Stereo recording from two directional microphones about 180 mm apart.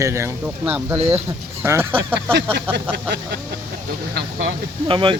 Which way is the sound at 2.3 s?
70° right (ahead or behind).